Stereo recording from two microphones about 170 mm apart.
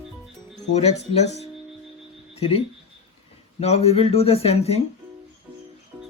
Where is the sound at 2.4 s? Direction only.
35° left (ahead or behind).